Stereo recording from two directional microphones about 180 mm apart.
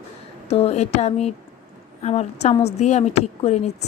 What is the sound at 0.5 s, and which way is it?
Speech, 35° left (ahead or behind).